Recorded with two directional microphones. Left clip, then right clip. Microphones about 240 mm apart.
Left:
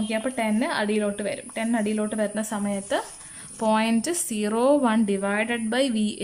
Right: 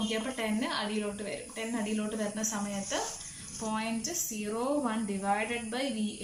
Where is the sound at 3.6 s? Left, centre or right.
Left.